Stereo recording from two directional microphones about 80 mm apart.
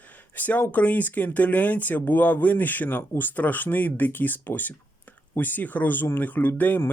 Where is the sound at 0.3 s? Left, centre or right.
Left.